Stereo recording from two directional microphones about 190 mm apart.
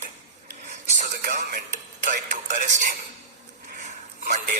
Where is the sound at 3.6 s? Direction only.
40° right (ahead or behind).